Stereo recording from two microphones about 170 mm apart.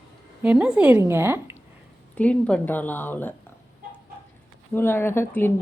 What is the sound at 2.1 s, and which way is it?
A woman's voice, 5° left (ahead or behind).